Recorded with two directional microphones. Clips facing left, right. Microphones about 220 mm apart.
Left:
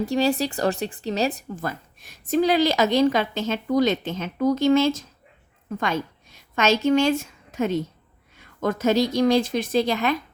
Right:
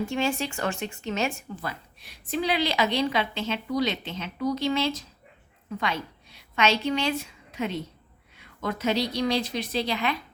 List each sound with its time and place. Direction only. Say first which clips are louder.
0.0 s a woman's voice: left 5 dB; 35° left (ahead or behind)